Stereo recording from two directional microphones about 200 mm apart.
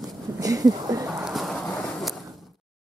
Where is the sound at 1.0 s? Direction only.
5° right (ahead or behind).